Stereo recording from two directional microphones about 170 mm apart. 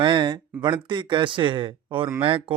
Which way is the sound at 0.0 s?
30° right (ahead or behind).